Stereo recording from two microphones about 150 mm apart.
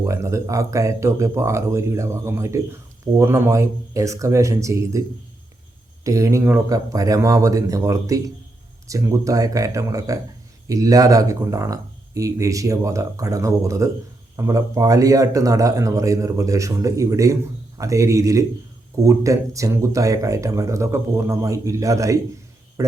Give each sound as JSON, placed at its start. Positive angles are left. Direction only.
{"t": 0.0, "sound": "speech", "side_deg": -20}
{"t": 6.1, "sound": "speech", "side_deg": -20}